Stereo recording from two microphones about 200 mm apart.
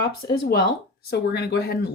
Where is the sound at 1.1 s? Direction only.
55° left (ahead or behind).